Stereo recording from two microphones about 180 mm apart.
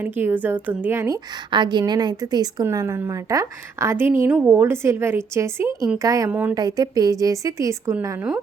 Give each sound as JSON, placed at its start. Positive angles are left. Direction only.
{"t": 0.0, "sound": "a woman's voice", "side_deg": -10}
{"t": 1.5, "sound": "a woman's voice", "side_deg": -25}